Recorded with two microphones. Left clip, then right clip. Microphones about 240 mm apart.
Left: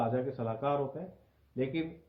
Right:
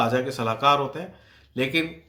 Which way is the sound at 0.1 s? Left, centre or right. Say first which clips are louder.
Right 9 dB; centre.